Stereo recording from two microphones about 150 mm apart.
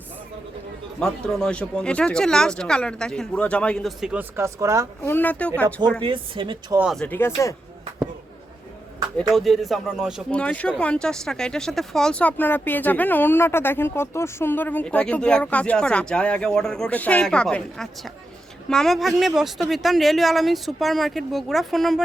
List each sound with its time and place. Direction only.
0.9 s speech: 5° left (ahead or behind); by 4.9 s 20° right (ahead or behind)
5.0 s speech: 10° left (ahead or behind)
6.0 s speech: 35° right (ahead or behind)
6.9 s speech: 10° left (ahead or behind)
9.3 s speech: centre (ahead or behind)
10.3 s speech: 10° left (ahead or behind)